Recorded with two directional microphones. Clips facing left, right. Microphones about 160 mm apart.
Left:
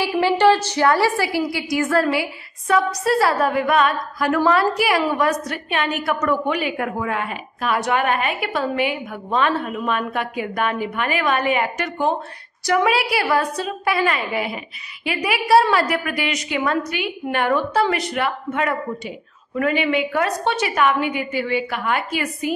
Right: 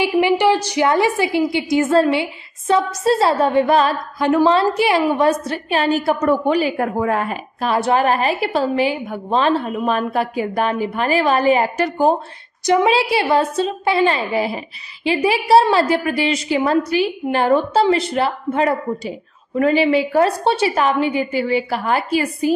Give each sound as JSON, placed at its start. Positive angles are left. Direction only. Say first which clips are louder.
{"t": 0.0, "sound": "a woman's voice", "louder": "right 1 dB", "side_deg": -15}
{"t": 12.6, "sound": "a woman's voice", "louder": "right 4 dB", "side_deg": -25}